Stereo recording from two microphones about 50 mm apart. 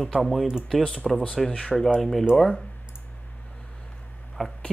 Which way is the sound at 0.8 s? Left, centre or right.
Centre.